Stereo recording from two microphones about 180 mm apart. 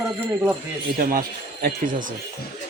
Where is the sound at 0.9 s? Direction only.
55° right (ahead or behind).